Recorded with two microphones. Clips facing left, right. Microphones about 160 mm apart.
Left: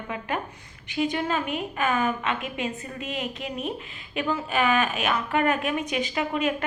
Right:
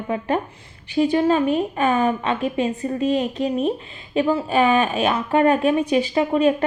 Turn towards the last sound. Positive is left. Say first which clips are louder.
# right 8 dB
turn(degrees=-30)  # may be behind; listen again after turning